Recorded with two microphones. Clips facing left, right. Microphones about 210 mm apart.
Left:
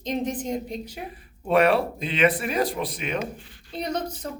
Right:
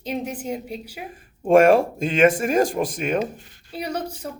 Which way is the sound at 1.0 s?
45° right (ahead or behind).